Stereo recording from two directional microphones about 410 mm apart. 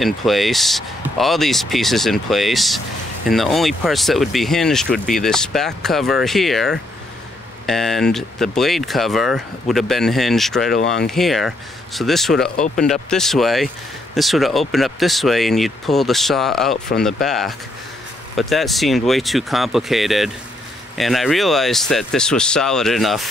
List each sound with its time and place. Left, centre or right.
0.0 s speech: centre
10.7 s speech: left
11.1 s speech: centre